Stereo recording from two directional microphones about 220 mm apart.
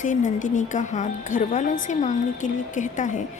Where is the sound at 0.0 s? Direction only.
35° left (ahead or behind).